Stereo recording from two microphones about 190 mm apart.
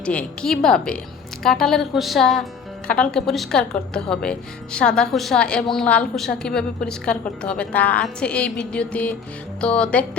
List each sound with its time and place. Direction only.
0.0 s a woman's voice: 5° left (ahead or behind)